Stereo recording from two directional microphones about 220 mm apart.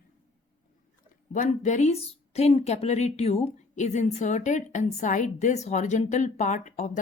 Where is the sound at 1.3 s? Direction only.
35° left (ahead or behind).